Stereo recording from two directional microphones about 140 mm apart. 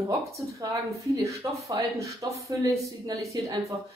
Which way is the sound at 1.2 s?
20° right (ahead or behind).